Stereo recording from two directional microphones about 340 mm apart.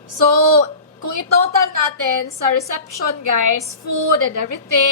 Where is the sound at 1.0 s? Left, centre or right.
Right.